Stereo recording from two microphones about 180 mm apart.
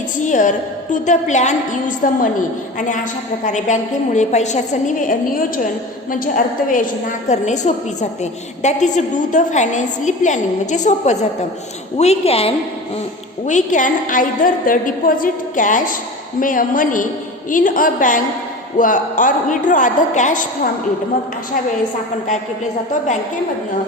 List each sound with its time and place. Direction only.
0.3 s a woman's voice: 45° left (ahead or behind)
13.4 s a woman's voice: 45° left (ahead or behind)